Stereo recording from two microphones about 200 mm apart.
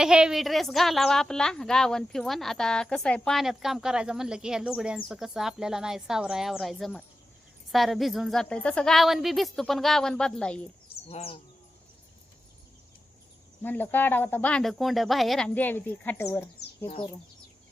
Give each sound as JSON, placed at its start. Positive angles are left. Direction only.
{"t": 0.0, "sound": "a woman's voice", "side_deg": -5}
{"t": 11.1, "sound": "speech", "side_deg": 30}
{"t": 13.6, "sound": "speech", "side_deg": 10}
{"t": 16.6, "sound": "bird", "side_deg": 30}